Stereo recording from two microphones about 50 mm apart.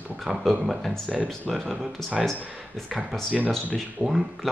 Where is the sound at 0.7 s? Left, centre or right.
Centre.